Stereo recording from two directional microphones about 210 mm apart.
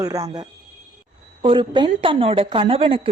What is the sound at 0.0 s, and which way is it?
A woman's voice, 15° right (ahead or behind).